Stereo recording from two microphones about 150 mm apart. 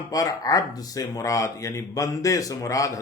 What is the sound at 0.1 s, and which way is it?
Speech, 25° left (ahead or behind).